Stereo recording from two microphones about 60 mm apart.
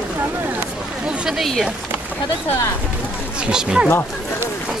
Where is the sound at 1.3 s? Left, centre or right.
Centre.